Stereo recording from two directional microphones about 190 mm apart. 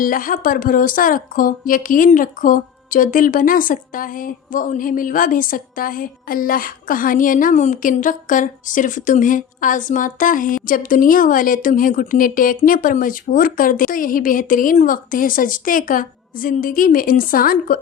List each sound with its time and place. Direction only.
0.0 s a woman's voice: 45° left (ahead or behind)